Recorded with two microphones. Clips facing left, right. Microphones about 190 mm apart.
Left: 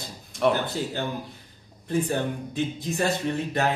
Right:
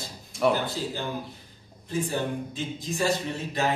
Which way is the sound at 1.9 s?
60° left (ahead or behind).